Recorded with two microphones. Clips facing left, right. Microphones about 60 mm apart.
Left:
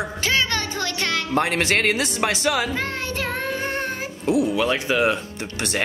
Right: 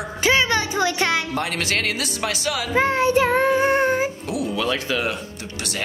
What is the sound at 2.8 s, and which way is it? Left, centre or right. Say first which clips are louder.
Child singing: right 9 dB; centre.